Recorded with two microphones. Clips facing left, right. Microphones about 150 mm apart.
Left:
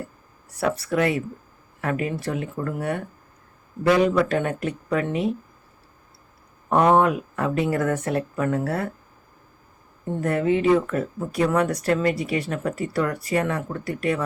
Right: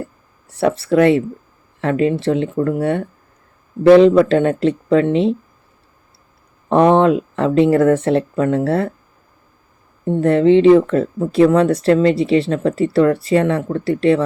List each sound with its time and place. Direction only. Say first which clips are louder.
0.5 s speech: right 8 dB; 25° right (ahead or behind)
6.7 s speech: right 6 dB; 25° right (ahead or behind)
10.1 s speech: right 10 dB; 25° right (ahead or behind)